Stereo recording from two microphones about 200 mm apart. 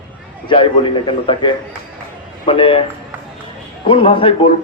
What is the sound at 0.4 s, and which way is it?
A man's voice, 25° left (ahead or behind).